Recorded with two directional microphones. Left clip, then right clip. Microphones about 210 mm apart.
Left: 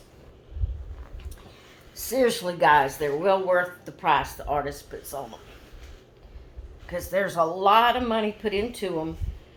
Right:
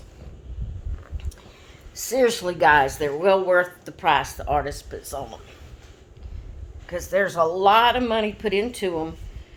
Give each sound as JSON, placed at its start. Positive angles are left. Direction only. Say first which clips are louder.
{"t": 2.0, "sound": "speech", "louder": "right 3 dB", "side_deg": -40}
{"t": 6.8, "sound": "speech", "louder": "right 4 dB", "side_deg": -40}